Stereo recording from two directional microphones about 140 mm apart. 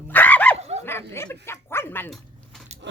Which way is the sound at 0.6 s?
50° right (ahead or behind).